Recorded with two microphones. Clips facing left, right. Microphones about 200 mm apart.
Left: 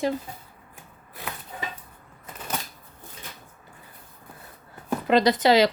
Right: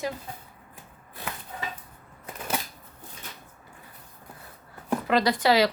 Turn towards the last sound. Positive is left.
turn(degrees=20)  # may be behind; listen again after turning